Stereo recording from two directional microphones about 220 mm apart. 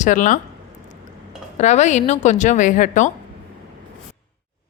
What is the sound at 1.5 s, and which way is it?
Speech, 30° left (ahead or behind).